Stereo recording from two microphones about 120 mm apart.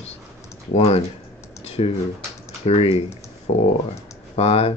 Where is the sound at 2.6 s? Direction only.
60° left (ahead or behind).